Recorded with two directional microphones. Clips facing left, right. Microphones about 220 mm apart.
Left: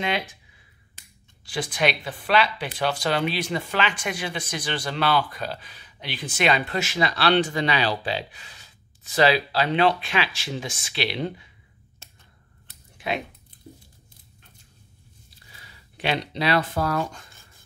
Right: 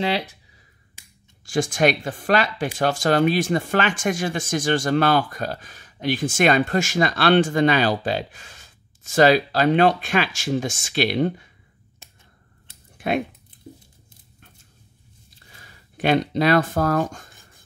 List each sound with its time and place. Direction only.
0.0 s speech: 35° right (ahead or behind)
1.4 s speech: 45° right (ahead or behind)
12.9 s typing: 50° right (ahead or behind)
15.5 s speech: 45° right (ahead or behind)